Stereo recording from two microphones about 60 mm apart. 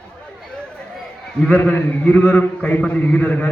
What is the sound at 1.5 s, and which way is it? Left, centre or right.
A man's voice, left.